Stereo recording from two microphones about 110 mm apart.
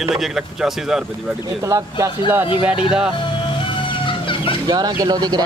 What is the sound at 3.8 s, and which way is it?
Music, 50° left (ahead or behind).